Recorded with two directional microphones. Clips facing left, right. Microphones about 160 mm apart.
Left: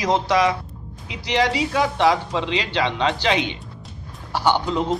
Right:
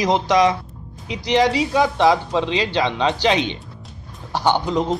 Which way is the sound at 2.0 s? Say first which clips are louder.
Right 3 dB; 20° right (ahead or behind).